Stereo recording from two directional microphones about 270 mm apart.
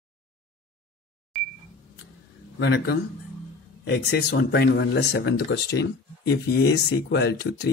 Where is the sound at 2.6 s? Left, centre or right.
Left.